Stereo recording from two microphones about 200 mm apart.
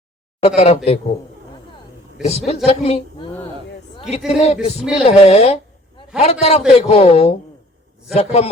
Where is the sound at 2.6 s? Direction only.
30° left (ahead or behind).